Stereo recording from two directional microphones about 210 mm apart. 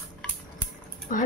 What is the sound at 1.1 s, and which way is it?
Speech, 40° left (ahead or behind).